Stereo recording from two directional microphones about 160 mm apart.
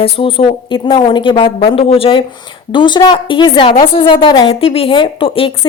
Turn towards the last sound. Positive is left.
turn(degrees=35)  # may be behind; listen again after turning